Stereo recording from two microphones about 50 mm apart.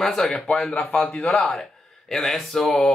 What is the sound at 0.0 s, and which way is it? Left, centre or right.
Speech, centre.